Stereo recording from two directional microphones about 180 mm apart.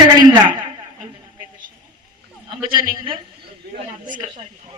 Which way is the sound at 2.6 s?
30° right (ahead or behind).